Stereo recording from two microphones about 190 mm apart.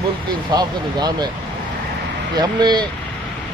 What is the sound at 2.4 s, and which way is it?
Speech, 20° right (ahead or behind).